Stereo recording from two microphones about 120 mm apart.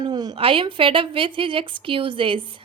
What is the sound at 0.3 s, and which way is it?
A woman's voice, 45° right (ahead or behind).